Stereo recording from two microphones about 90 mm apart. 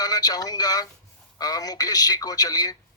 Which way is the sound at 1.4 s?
45° left (ahead or behind).